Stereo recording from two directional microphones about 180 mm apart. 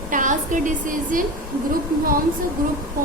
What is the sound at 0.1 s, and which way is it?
A woman's voice, 45° right (ahead or behind).